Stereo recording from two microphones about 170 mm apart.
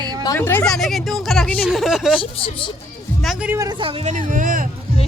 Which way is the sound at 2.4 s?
30° left (ahead or behind).